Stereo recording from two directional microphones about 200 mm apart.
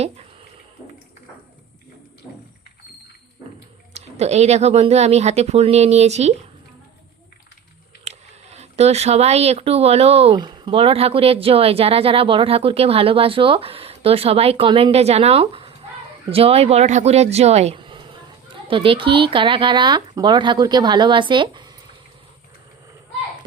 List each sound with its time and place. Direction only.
3.9 s speech: 35° right (ahead or behind)
8.0 s speech: 35° right (ahead or behind)